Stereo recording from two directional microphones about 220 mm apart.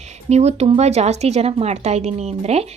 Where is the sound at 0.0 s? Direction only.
30° right (ahead or behind).